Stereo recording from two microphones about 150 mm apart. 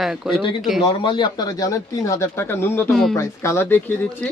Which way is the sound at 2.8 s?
Centre (ahead or behind).